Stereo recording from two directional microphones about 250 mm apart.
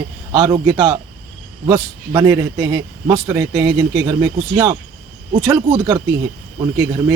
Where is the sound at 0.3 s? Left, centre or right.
Centre.